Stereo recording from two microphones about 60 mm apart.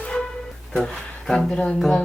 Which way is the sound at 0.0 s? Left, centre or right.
Centre.